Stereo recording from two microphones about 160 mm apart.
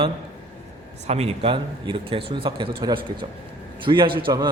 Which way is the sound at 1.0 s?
40° right (ahead or behind).